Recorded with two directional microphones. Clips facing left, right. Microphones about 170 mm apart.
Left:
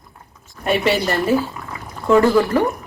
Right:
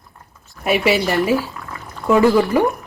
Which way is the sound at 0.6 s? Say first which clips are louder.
Right 1 dB; 10° right (ahead or behind).